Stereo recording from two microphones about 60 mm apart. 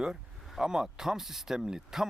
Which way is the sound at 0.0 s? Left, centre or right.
Centre.